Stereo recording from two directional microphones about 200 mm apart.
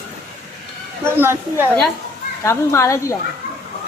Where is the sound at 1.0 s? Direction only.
10° right (ahead or behind).